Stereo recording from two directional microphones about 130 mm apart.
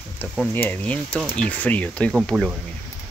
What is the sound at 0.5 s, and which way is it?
Speech, 15° left (ahead or behind).